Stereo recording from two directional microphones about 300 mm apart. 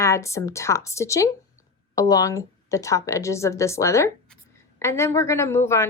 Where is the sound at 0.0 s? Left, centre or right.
Centre.